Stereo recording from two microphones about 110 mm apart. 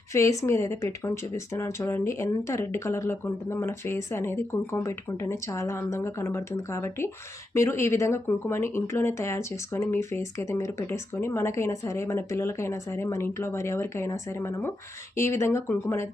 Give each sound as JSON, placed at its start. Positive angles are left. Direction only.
{"t": 0.1, "sound": "speech", "side_deg": 30}